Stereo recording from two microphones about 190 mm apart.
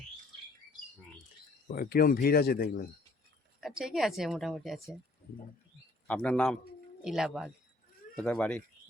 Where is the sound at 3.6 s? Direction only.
Centre (ahead or behind).